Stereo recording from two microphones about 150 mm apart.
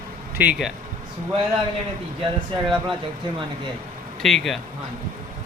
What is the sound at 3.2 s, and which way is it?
Speech, 30° right (ahead or behind).